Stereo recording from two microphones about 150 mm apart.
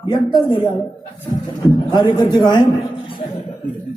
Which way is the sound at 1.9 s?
30° left (ahead or behind).